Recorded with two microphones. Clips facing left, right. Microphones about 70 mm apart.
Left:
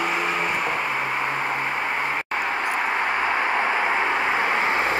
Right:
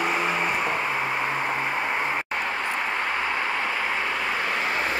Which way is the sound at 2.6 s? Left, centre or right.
Centre.